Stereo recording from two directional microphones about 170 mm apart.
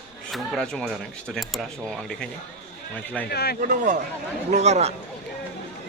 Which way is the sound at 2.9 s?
10° left (ahead or behind).